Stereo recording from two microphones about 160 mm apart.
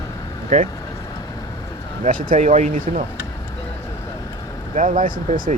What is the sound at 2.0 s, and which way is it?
Speech, 50° right (ahead or behind).